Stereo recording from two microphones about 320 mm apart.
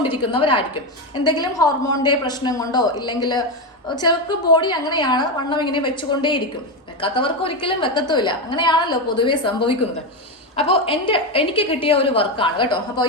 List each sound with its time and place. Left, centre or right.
0.0 s a woman's voice: left
0.3 s a woman's voice: centre